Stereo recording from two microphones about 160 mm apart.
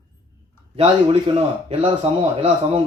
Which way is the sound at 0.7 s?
35° right (ahead or behind).